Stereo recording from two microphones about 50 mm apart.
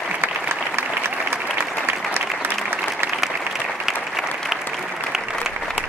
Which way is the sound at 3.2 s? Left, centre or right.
Centre.